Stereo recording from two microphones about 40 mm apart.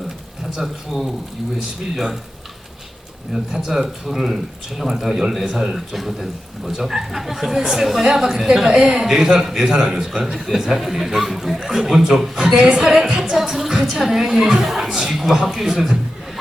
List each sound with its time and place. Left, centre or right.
0.5 s speech: centre
3.3 s speech: centre
13.1 s music: right
13.3 s music: centre
14.1 s speech: centre